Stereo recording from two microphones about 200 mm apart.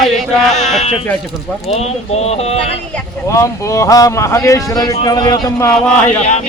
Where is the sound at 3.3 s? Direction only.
15° left (ahead or behind).